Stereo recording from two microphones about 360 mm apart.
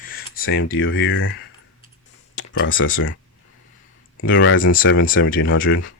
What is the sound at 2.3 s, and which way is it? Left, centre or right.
Speech, left.